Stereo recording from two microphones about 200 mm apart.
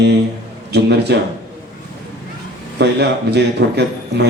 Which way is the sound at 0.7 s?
55° right (ahead or behind).